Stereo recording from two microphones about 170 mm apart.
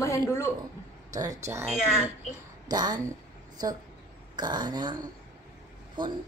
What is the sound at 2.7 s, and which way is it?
Speech, 25° right (ahead or behind).